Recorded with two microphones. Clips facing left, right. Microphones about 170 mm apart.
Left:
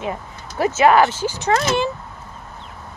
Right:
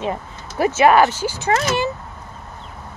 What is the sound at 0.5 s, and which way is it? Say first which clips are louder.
Speech: right 1 dB; 15° right (ahead or behind).